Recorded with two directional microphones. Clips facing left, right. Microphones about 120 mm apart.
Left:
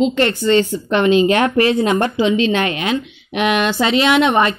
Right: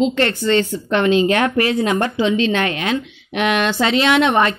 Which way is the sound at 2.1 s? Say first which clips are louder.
Left 2 dB; 10° left (ahead or behind).